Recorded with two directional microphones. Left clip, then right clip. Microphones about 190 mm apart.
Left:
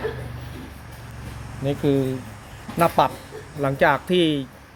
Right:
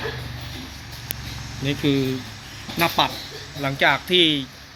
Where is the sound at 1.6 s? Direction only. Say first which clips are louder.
Left 1 dB; 40° left (ahead or behind).